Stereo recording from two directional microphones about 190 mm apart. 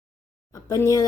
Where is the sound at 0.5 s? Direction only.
15° left (ahead or behind).